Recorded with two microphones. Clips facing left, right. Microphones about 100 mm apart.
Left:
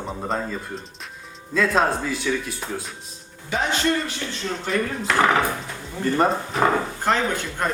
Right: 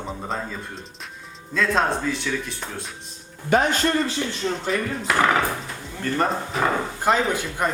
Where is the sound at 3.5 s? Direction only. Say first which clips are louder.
Right 5 dB; 50° right (ahead or behind).